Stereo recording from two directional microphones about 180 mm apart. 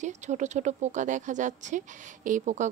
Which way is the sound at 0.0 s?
40° right (ahead or behind).